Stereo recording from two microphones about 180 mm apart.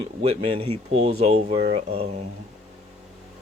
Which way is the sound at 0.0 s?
35° right (ahead or behind).